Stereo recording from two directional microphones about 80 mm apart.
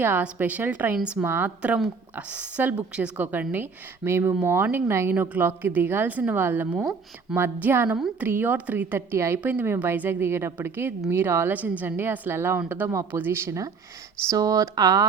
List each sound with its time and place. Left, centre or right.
0.2 s a woman's voice: centre
0.9 s a woman's voice: centre
1.2 s a woman's voice: right
9.4 s a woman's voice: right
14.3 s speech: right